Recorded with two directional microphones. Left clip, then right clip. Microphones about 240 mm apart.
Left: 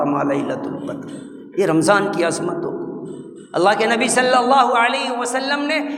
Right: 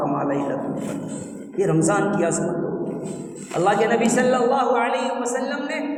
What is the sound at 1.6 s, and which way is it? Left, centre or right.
Speech, left.